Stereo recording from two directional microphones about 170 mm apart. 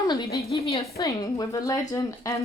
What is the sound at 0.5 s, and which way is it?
Speech, 35° left (ahead or behind).